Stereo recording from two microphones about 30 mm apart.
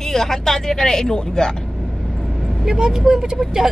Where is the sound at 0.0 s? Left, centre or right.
Centre.